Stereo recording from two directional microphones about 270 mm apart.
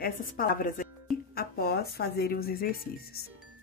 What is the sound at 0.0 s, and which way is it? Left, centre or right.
Speech, left.